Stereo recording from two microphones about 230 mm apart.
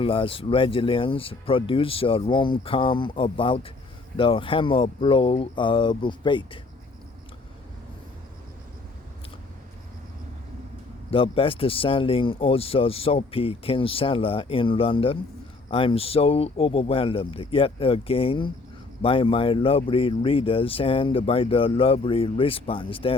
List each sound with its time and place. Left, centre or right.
0.0 s speech: left
11.1 s speech: left